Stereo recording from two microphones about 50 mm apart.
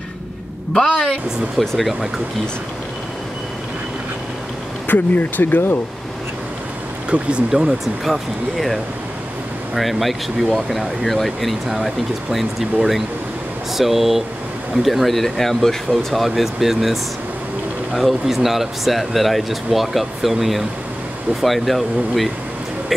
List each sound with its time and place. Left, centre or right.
0.7 s speech: centre
4.8 s speech: left
7.1 s speech: right
7.6 s speech: centre
9.8 s speech: centre
13.7 s speech: centre